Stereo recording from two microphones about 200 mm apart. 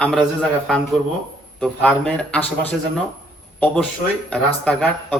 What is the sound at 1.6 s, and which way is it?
Speech, 5° left (ahead or behind).